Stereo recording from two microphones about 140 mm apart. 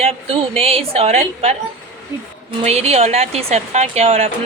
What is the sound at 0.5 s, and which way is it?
Speech, 45° right (ahead or behind).